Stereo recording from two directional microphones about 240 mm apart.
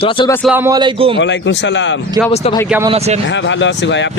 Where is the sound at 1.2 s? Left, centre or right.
Left.